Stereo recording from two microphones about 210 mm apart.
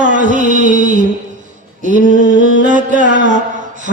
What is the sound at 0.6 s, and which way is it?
Mantra, 40° left (ahead or behind).